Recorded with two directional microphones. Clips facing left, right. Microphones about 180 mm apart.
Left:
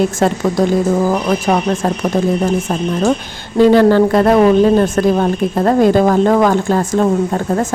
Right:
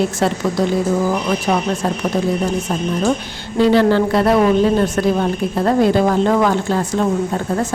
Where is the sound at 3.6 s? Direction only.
45° left (ahead or behind).